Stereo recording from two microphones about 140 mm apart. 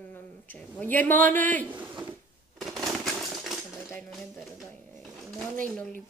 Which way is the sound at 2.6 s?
Centre (ahead or behind).